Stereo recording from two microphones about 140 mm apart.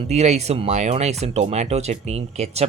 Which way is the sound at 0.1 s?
50° right (ahead or behind).